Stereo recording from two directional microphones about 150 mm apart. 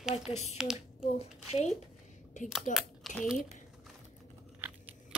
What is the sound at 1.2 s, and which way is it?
A child's voice, 45° left (ahead or behind).